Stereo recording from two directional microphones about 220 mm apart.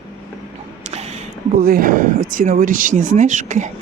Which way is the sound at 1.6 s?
40° right (ahead or behind).